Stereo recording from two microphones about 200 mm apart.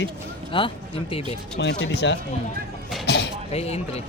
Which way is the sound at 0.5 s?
25° left (ahead or behind).